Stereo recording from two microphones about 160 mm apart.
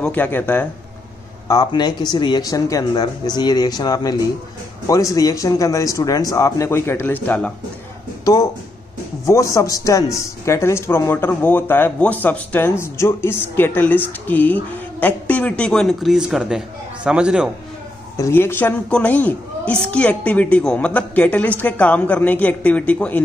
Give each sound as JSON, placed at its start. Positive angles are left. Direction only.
{"t": 0.0, "sound": "speech", "side_deg": 10}
{"t": 1.5, "sound": "speech", "side_deg": 25}
{"t": 9.2, "sound": "speech", "side_deg": 20}
{"t": 18.1, "sound": "speech", "side_deg": 15}